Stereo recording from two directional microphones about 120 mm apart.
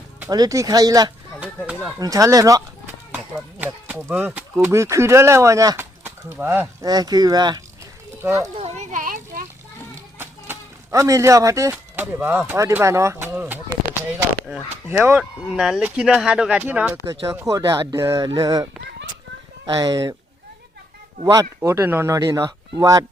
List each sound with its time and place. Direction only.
0.3 s speech: 30° right (ahead or behind)
3.6 s speech: 15° right (ahead or behind)
6.8 s speech: 35° right (ahead or behind)
8.2 s speech: 20° right (ahead or behind)
8.5 s a sound: 60° right (ahead or behind); by 9.4 s 90° right
10.2 s speech: 20° right (ahead or behind)
14.8 s speech: 20° right (ahead or behind)
15.2 s speech: 5° right (ahead or behind); by 20.1 s 30° right (ahead or behind)
21.2 s speech: 25° right (ahead or behind)